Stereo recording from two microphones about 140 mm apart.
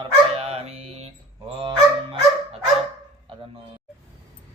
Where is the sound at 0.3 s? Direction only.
45° right (ahead or behind).